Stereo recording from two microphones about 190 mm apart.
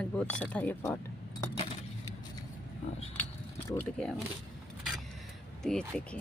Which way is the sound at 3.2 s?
10° left (ahead or behind).